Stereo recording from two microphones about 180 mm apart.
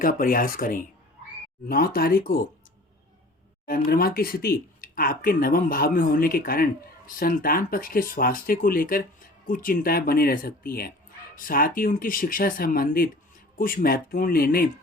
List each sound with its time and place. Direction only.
0.0 s speech: 50° left (ahead or behind)
3.7 s speech: 55° left (ahead or behind)